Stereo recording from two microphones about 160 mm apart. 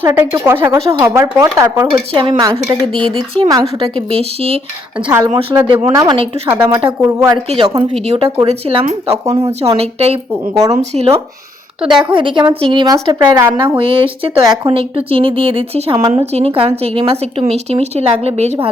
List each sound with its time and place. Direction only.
0.0 s speech: 15° right (ahead or behind)
1.9 s speech: 30° right (ahead or behind)
5.9 s speech: 20° right (ahead or behind)
6.1 s speech: 40° right (ahead or behind)
7.0 s speech: 20° right (ahead or behind)
7.6 s speech: 30° right (ahead or behind)
8.0 s speech: 40° right (ahead or behind); by 13.5 s 20° right (ahead or behind)
13.7 s speech: 35° right (ahead or behind)
16.2 s speech: 40° right (ahead or behind)